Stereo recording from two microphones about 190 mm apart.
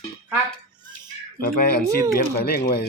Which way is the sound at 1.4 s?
55° left (ahead or behind).